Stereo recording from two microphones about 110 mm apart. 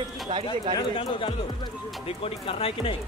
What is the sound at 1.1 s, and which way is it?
Speech, 50° left (ahead or behind).